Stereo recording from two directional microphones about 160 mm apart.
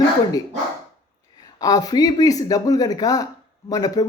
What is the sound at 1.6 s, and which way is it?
Speech, 25° left (ahead or behind).